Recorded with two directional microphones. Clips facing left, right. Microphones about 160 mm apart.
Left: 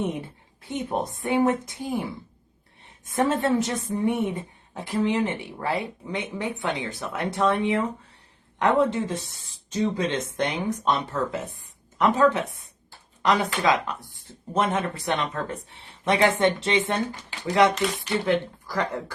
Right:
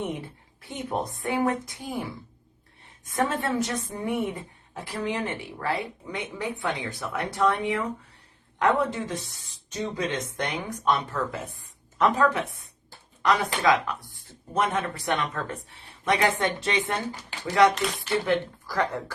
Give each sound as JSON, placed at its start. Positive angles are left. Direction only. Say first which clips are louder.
{"t": 0.6, "sound": "a woman's voice", "louder": "left 3 dB", "side_deg": 20}
{"t": 3.1, "sound": "a woman's voice", "louder": "left 4 dB", "side_deg": 25}
{"t": 17.7, "sound": "speech", "louder": "left 3 dB", "side_deg": 0}